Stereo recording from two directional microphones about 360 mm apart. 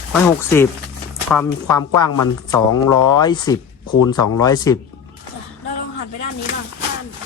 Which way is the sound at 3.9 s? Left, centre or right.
Left.